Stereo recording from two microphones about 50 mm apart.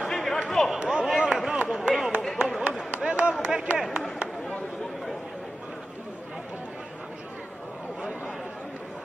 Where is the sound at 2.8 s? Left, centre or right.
Centre.